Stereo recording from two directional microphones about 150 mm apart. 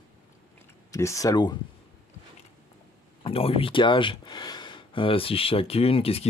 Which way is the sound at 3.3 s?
40° left (ahead or behind).